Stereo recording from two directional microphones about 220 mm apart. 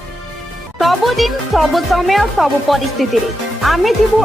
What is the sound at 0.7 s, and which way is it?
Speech, centre (ahead or behind).